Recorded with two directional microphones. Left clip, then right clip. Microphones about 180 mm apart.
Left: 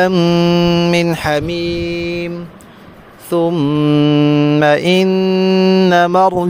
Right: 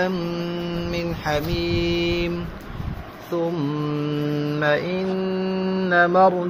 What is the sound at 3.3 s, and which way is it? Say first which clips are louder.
Mantra: left 10 dB; 50° left (ahead or behind).